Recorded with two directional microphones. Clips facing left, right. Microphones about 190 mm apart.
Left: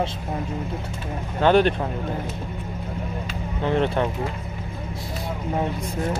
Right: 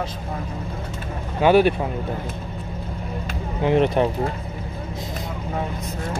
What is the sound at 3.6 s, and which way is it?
Speech, 15° right (ahead or behind).